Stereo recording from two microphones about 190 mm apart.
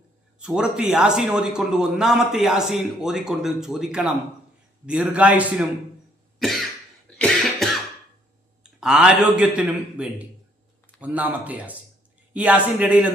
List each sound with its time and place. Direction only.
0.3 s a man's voice: 5° right (ahead or behind)
6.4 s cough: centre (ahead or behind)
8.6 s a man's voice: 5° right (ahead or behind)